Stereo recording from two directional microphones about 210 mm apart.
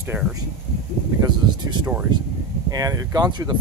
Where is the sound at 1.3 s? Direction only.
20° right (ahead or behind).